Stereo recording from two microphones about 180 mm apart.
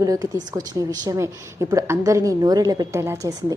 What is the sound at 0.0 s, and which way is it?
A woman's voice, 20° right (ahead or behind).